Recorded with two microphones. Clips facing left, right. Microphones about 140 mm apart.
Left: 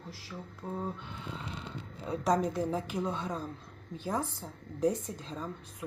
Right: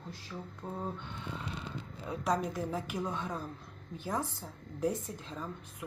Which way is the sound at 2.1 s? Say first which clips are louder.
Left 4 dB; 35° left (ahead or behind).